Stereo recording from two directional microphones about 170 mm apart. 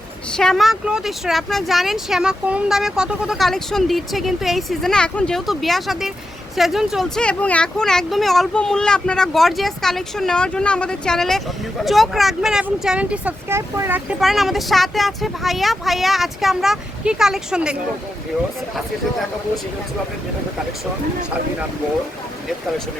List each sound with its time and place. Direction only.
0.3 s speech: 5° left (ahead or behind); by 14.2 s 10° right (ahead or behind)
14.2 s speech: centre (ahead or behind)